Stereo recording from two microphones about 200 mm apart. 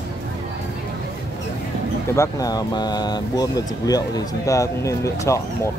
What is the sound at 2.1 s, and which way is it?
Speech, 20° left (ahead or behind).